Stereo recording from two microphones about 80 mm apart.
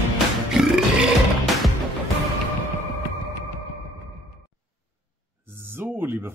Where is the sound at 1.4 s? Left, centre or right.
Centre.